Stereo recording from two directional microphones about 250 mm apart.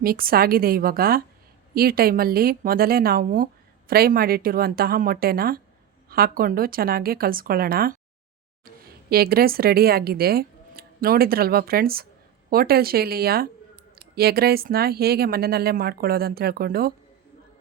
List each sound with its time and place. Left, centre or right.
0.0 s speech: right
9.0 s speech: right